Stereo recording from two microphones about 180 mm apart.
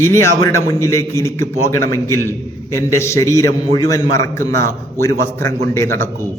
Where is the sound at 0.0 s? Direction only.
15° left (ahead or behind).